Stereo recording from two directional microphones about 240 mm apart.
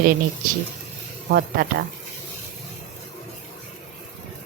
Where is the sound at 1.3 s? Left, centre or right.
Right.